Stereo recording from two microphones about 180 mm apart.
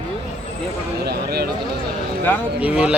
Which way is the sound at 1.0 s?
60° right (ahead or behind).